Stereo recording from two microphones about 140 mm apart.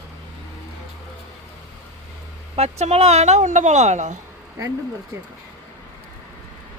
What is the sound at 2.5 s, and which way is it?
Speech, 50° right (ahead or behind).